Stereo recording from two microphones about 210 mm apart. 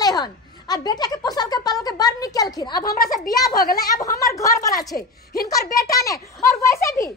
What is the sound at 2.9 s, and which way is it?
Speech, 45° left (ahead or behind).